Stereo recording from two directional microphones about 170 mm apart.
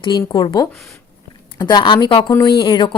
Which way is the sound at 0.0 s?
25° left (ahead or behind).